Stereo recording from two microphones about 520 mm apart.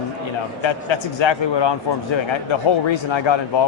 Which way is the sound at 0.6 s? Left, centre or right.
Left.